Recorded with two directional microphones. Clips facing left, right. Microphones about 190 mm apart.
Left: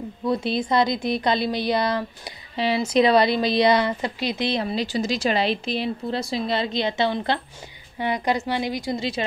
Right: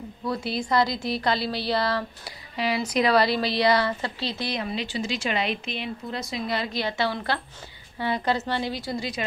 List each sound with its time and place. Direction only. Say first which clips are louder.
0.2 s speech: left 5 dB; 20° left (ahead or behind)
4.5 s speech: left 5 dB; 30° left (ahead or behind); by 9.0 s 15° left (ahead or behind)